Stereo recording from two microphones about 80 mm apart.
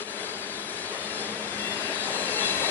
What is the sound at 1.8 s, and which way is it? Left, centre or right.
Train, left.